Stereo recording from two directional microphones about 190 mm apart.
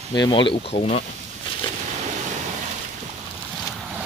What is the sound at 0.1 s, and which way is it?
Speech, 25° left (ahead or behind).